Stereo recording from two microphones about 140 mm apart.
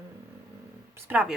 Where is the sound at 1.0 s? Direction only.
15° right (ahead or behind).